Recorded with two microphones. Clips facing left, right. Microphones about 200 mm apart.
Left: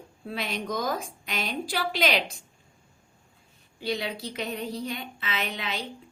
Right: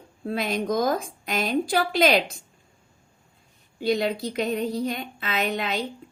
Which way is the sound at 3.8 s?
45° right (ahead or behind).